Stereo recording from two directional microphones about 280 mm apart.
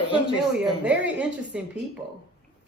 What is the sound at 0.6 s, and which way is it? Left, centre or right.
Speech, centre.